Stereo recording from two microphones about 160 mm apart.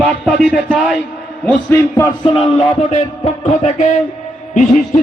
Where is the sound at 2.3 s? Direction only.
35° left (ahead or behind); by 5.0 s 50° left (ahead or behind).